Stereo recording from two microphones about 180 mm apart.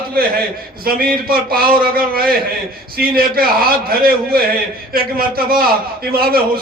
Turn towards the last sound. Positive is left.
turn(degrees=-55)  # may be behind; listen again after turning